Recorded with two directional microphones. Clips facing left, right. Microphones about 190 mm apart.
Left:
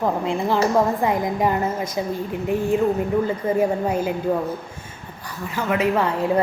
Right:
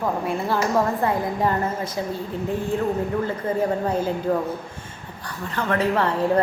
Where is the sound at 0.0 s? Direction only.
20° left (ahead or behind).